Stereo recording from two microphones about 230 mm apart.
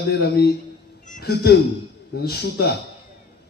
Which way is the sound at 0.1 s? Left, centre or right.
Left.